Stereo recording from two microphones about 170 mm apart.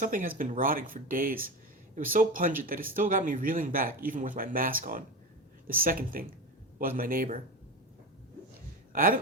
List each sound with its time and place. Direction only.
0.0 s speech: 50° right (ahead or behind)
8.9 s speech: 55° right (ahead or behind)